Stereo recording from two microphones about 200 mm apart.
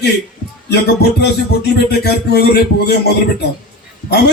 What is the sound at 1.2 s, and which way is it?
A man's voice, 55° left (ahead or behind).